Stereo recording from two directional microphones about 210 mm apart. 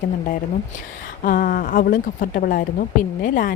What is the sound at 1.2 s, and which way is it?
A woman's voice, 40° left (ahead or behind).